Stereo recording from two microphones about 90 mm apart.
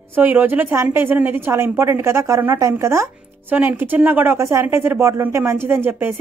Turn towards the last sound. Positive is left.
turn(degrees=-25)  # may be behind; listen again after turning